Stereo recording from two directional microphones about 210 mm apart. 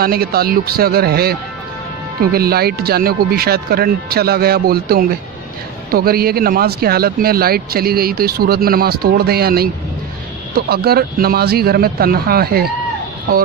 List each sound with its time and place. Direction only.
0.0 s speech: 45° right (ahead or behind)
2.3 s speech: 45° right (ahead or behind)